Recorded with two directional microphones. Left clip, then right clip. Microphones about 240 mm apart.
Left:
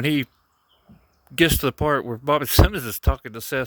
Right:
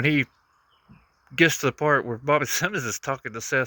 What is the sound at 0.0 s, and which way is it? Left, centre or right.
Speech, left.